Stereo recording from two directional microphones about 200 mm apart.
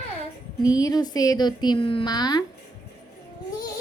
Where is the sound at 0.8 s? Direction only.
20° left (ahead or behind).